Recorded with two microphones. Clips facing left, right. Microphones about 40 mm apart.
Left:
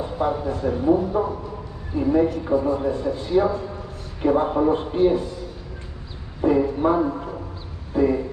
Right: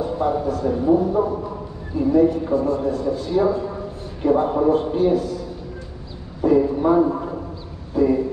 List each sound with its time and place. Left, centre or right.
0.0 s a man's voice: centre
6.4 s a man's voice: left
7.9 s a sound: centre